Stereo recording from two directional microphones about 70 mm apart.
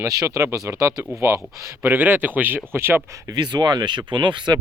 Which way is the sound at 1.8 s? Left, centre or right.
Right.